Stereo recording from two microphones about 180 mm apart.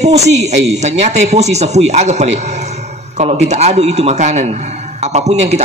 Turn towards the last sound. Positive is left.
turn(degrees=-40)  # may be behind; listen again after turning